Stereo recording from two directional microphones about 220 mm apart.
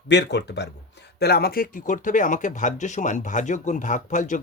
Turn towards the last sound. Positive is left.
turn(degrees=35)  # may be behind; listen again after turning